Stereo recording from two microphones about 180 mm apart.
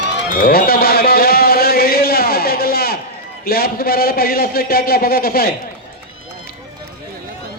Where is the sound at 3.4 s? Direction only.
55° left (ahead or behind).